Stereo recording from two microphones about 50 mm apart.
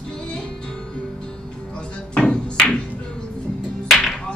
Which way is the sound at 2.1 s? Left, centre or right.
Centre.